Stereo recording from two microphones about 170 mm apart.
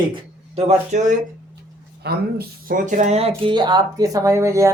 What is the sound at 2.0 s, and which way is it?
Speech, 70° right (ahead or behind).